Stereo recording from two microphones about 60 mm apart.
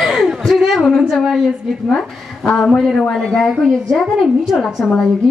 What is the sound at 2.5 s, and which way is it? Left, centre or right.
Speech, centre.